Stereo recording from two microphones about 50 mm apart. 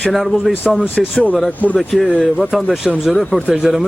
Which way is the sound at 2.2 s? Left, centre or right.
Centre.